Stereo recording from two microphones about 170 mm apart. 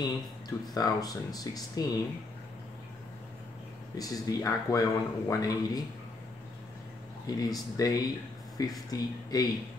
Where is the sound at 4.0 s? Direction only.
20° left (ahead or behind).